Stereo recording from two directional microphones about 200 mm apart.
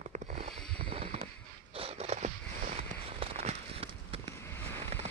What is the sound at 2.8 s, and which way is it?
Fireworks, 30° right (ahead or behind).